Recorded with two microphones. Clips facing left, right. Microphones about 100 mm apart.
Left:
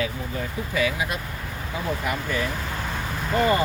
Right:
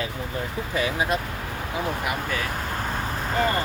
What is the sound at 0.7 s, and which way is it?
Speech, 30° right (ahead or behind).